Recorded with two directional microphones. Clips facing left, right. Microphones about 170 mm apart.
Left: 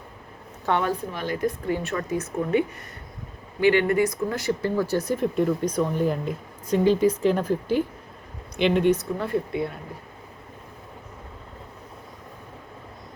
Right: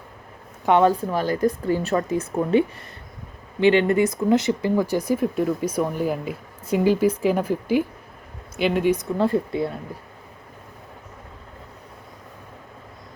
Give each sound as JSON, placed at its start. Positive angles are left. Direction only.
{"t": 0.8, "sound": "speech", "side_deg": -35}
{"t": 9.1, "sound": "speech", "side_deg": -30}